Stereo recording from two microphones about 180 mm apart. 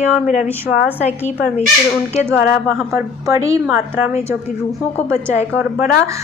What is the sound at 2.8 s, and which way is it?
A woman's voice, 15° right (ahead or behind).